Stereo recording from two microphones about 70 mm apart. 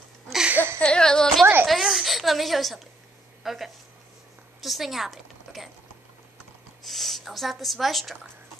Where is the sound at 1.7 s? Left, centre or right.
Centre.